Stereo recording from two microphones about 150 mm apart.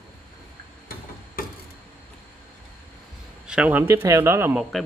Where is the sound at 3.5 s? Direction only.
10° right (ahead or behind).